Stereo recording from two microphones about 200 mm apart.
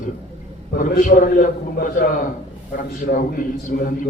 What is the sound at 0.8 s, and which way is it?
A man's voice, 45° left (ahead or behind).